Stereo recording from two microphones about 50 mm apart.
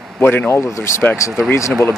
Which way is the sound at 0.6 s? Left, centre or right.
Left.